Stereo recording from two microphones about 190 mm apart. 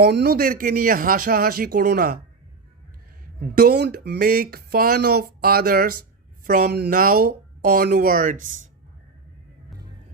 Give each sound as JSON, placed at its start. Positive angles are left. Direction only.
{"t": 0.0, "sound": "speech", "side_deg": -60}
{"t": 3.6, "sound": "speech", "side_deg": -60}